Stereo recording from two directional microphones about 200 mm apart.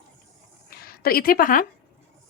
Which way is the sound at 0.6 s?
50° left (ahead or behind).